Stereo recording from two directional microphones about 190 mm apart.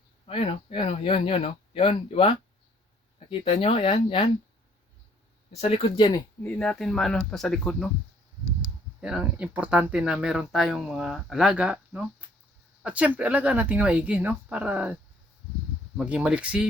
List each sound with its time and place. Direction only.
0.3 s speech: 30° left (ahead or behind)
5.5 s speech: 30° left (ahead or behind)
6.4 s speech: 5° left (ahead or behind)
9.0 s speech: 5° right (ahead or behind)
16.0 s speech: 5° right (ahead or behind)